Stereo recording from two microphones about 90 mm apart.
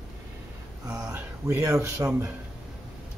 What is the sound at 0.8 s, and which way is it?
Speech, 40° right (ahead or behind).